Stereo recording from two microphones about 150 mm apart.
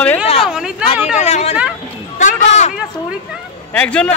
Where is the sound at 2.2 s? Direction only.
55° left (ahead or behind).